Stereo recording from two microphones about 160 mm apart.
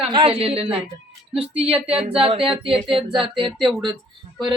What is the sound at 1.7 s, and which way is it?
Speech, 5° right (ahead or behind).